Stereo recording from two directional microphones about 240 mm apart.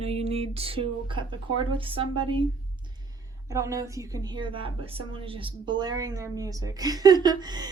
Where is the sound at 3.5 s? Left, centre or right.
Centre.